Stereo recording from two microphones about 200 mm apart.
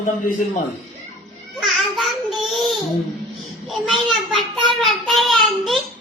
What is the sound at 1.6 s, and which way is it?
Child singing, centre (ahead or behind).